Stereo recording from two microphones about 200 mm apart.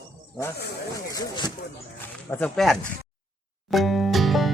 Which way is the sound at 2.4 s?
Centre (ahead or behind).